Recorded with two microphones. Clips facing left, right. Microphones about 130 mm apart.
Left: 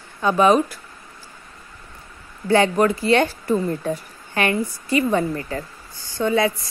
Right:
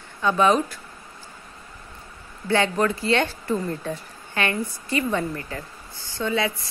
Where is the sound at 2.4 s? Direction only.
35° left (ahead or behind).